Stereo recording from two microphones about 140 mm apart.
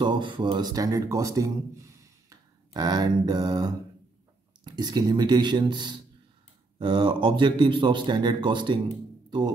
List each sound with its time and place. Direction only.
0.0 s speech: 35° right (ahead or behind)